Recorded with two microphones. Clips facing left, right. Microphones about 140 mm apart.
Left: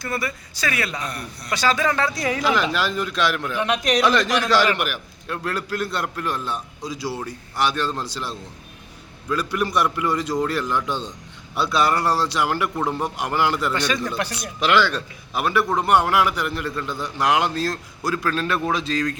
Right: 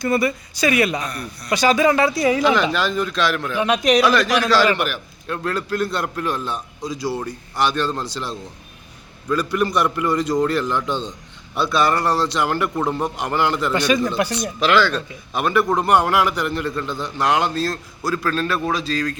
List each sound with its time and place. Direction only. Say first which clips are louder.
0.0 s speech: right 8 dB; 20° right (ahead or behind)
1.0 s speech: right 2 dB; 25° left (ahead or behind)
1.5 s a man's voice: right 5 dB; 15° right (ahead or behind); by 3.6 s 15° left (ahead or behind)
3.6 s a man's voice: right 5 dB; centre (ahead or behind)
4.0 s speech: right 2 dB; 25° left (ahead or behind)
4.8 s a man's voice: right 3 dB; 5° left (ahead or behind)
13.7 s speech: right 6 dB; 10° right (ahead or behind)
14.3 s a man's voice: even; 10° left (ahead or behind)